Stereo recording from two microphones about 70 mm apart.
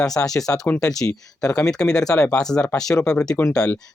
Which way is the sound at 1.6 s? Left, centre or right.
Centre.